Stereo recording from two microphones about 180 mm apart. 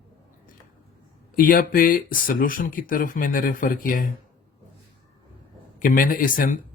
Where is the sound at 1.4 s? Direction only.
50° left (ahead or behind).